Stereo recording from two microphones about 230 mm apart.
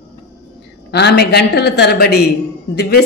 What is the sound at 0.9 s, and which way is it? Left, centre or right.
A woman's voice, left.